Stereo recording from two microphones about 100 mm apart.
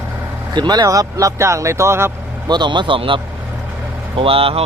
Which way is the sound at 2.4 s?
45° right (ahead or behind).